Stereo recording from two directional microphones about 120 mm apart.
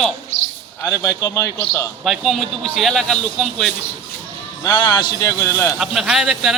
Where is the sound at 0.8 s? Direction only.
25° left (ahead or behind).